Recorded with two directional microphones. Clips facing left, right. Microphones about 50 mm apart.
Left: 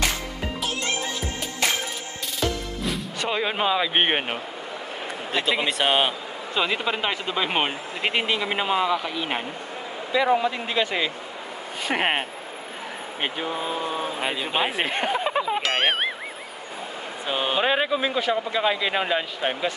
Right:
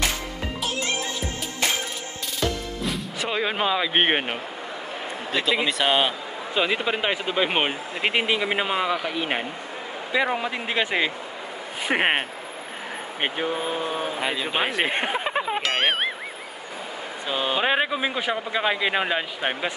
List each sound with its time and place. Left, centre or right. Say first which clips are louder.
0.6 s music: right 1 dB; centre
2.8 s speech: left 1 dB; centre
5.9 s speech: even; centre
6.5 s speech: right 1 dB; centre
14.2 s speech: right 1 dB; centre
14.9 s a sound: left 1 dB; centre
15.6 s ding: even; centre
17.3 s speech: even; centre
17.6 s speech: even; centre